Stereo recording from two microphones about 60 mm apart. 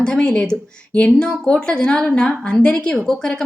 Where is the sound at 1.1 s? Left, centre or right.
Centre.